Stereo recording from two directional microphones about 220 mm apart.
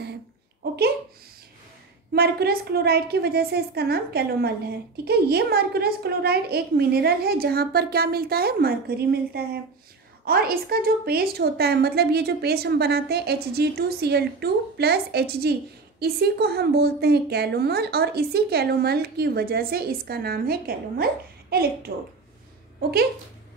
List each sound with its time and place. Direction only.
2.1 s a woman's voice: 45° right (ahead or behind)